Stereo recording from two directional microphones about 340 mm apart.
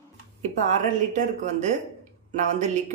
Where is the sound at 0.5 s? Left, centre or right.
Right.